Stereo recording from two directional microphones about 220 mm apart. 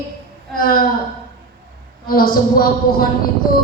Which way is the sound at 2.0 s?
40° left (ahead or behind).